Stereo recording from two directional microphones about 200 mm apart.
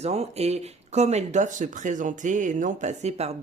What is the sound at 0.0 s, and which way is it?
Speech, 30° right (ahead or behind).